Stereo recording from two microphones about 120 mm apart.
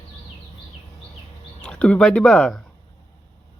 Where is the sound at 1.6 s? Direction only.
10° left (ahead or behind).